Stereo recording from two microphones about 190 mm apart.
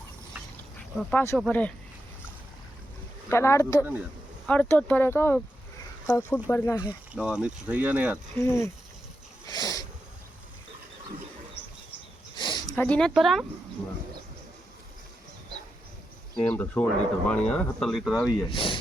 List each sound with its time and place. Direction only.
0.9 s speech: 10° left (ahead or behind)
3.2 s speech: 15° left (ahead or behind)
7.1 s speech: 5° right (ahead or behind)
8.4 s speech: 15° left (ahead or behind)
9.5 s a sound: 20° left (ahead or behind)
12.4 s a sound: 25° left (ahead or behind)
12.7 s speech: 5° left (ahead or behind)
16.3 s speech: 5° left (ahead or behind)
18.5 s speech: 25° left (ahead or behind)